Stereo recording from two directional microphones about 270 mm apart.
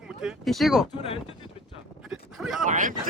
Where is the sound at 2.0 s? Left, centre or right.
Centre.